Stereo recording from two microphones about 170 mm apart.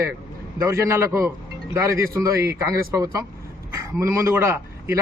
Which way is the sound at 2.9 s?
20° right (ahead or behind).